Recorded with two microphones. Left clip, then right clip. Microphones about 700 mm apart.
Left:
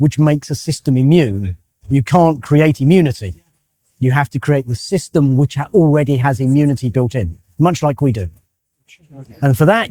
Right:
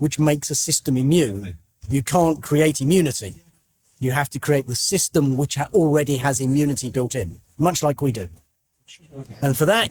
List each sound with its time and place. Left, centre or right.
0.0 s speech: left
9.4 s speech: left